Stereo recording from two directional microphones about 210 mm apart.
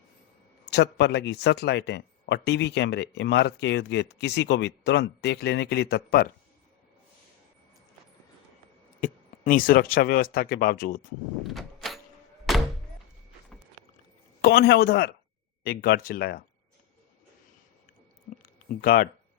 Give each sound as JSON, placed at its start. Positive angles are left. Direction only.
{"t": 0.6, "sound": "speech", "side_deg": 55}
{"t": 9.0, "sound": "speech", "side_deg": 40}
{"t": 11.4, "sound": "door", "side_deg": 0}
{"t": 12.5, "sound": "thunk", "side_deg": 0}
{"t": 14.4, "sound": "speech", "side_deg": 50}
{"t": 18.4, "sound": "a sound", "side_deg": 40}